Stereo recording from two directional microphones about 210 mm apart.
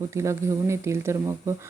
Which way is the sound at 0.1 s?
15° right (ahead or behind).